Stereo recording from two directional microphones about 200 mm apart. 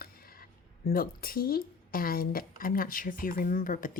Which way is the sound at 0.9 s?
45° left (ahead or behind).